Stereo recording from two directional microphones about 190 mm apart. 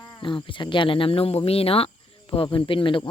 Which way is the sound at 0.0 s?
20° left (ahead or behind).